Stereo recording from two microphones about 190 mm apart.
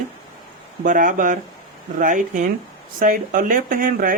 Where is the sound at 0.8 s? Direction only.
45° right (ahead or behind).